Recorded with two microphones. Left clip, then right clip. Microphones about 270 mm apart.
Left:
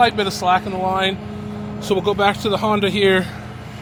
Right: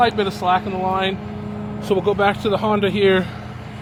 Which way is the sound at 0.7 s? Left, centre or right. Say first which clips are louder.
Left 1 dB; left.